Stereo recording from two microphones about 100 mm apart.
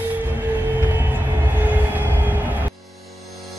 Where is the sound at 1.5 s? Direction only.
15° right (ahead or behind).